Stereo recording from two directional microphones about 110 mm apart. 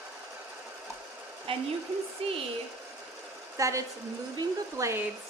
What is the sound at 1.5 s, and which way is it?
Speech, 55° right (ahead or behind).